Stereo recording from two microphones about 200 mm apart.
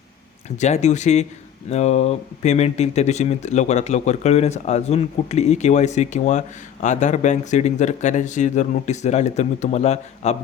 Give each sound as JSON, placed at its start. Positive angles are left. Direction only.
{"t": 0.5, "sound": "speech", "side_deg": 35}